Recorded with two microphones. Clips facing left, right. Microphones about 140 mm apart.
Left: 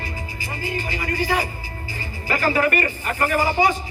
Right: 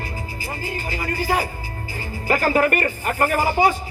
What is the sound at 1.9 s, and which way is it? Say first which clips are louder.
Speech: right 4 dB; 45° right (ahead or behind).